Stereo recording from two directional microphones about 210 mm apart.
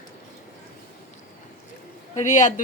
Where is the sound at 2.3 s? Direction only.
35° left (ahead or behind).